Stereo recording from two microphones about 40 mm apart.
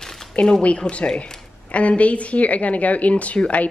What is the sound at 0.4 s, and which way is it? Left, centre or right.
A woman's voice, left.